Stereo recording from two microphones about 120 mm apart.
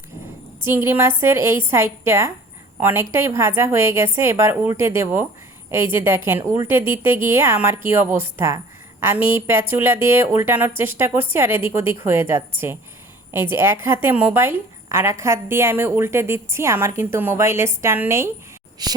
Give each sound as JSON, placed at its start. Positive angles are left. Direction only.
{"t": 0.6, "sound": "a woman's voice", "side_deg": -20}
{"t": 18.8, "sound": "speech", "side_deg": -35}